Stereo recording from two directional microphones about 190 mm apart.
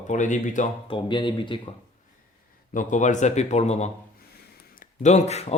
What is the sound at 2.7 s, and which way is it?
Speech, 40° left (ahead or behind).